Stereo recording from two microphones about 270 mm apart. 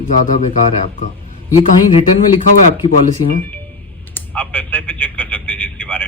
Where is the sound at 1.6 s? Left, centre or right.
Centre.